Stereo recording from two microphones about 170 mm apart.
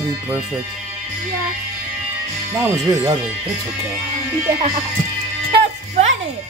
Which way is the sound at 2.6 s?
20° right (ahead or behind).